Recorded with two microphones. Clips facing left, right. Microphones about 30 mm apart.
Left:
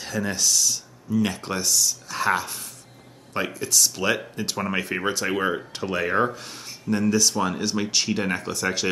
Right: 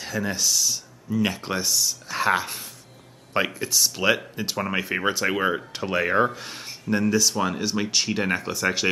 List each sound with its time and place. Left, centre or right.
0.0 s speech: centre